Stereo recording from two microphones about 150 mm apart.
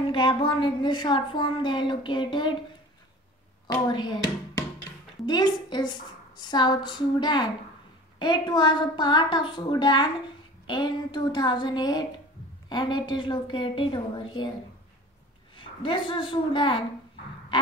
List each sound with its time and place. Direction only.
0.0 s speech: 35° left (ahead or behind)
3.6 s a woman's voice: 30° left (ahead or behind)
15.5 s a woman's voice: 35° left (ahead or behind)